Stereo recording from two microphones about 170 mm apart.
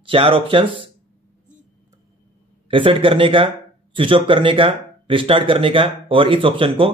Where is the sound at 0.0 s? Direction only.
30° right (ahead or behind).